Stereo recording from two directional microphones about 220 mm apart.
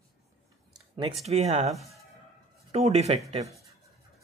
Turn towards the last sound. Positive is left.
turn(degrees=-30)  # may be behind; listen again after turning